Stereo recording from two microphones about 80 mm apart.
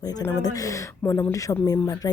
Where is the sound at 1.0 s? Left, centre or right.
Left.